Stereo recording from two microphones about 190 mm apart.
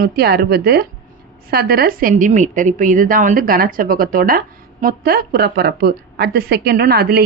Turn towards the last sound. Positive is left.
turn(degrees=-55)  # may be behind; listen again after turning